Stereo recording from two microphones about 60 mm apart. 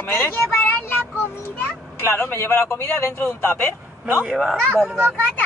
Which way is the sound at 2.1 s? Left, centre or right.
Left.